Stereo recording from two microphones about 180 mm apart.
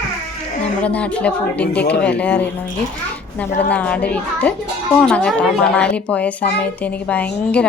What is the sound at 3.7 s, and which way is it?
A child's voice, 10° left (ahead or behind).